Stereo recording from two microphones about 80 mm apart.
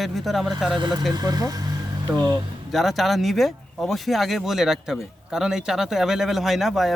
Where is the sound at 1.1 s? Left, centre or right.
Right.